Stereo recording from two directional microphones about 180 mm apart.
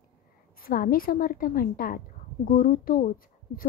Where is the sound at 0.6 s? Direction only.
50° left (ahead or behind).